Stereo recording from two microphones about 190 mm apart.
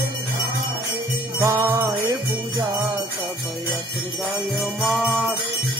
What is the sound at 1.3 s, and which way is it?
Jingle bell, 15° right (ahead or behind).